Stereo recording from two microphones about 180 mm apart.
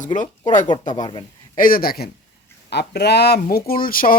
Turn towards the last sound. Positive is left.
turn(degrees=55)  # may be behind; listen again after turning